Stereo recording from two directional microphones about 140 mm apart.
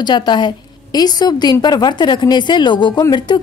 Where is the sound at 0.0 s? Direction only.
30° left (ahead or behind).